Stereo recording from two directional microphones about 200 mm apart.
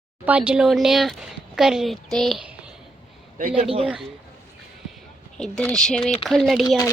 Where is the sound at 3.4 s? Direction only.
45° right (ahead or behind).